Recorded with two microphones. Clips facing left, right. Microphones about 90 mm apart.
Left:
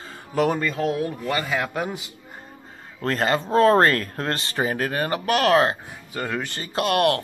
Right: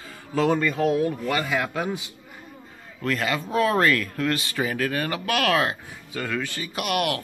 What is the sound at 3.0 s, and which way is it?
Speech, 40° left (ahead or behind).